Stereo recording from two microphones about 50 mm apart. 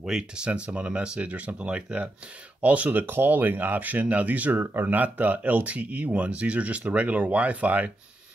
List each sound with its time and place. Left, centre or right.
0.0 s speech: centre
0.5 s speech: right